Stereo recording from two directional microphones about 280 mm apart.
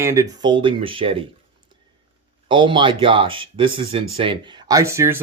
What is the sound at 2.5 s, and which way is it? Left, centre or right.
Speech, centre.